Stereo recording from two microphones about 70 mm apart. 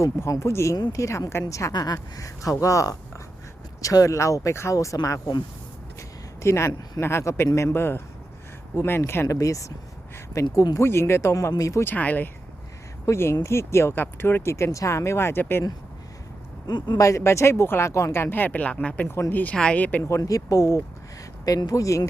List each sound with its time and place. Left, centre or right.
0.0 s speech: left
1.7 s speech: left
6.0 s a sound: left
7.0 s speech: left
9.2 s speech: left
10.5 s speech: left
10.8 s speech: left
11.9 s speech: left
13.1 s speech: left
16.6 s speech: left
17.0 s speech: left
20.1 s speech: left
21.4 s speech: left